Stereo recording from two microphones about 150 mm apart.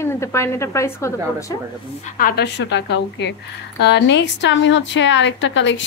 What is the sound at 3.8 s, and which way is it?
Speech, 90° left.